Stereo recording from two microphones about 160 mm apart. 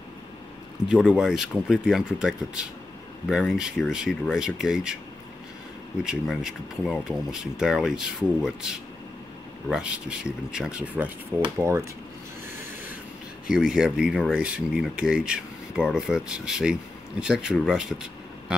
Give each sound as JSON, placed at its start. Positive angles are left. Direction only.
{"t": 0.8, "sound": "speech", "side_deg": -5}
{"t": 6.0, "sound": "speech", "side_deg": 0}
{"t": 13.5, "sound": "speech", "side_deg": -5}
{"t": 18.5, "sound": "a sound", "side_deg": -5}